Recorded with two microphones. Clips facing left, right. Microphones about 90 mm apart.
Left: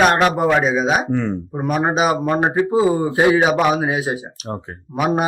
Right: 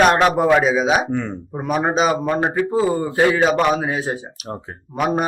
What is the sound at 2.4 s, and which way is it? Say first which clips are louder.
Speech: left 2 dB; 25° left (ahead or behind).